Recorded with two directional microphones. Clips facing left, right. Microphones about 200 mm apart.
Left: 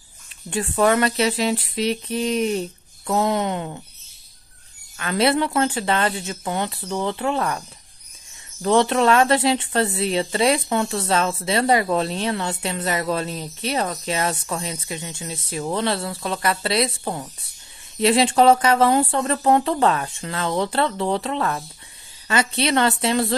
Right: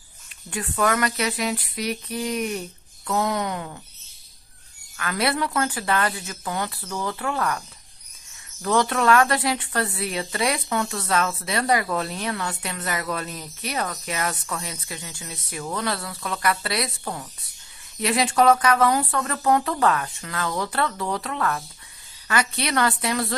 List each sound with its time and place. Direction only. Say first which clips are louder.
0.5 s speech: left 5 dB; 30° left (ahead or behind)
4.9 s speech: left 5 dB; 25° left (ahead or behind)
8.6 s speech: left 3 dB; 25° left (ahead or behind)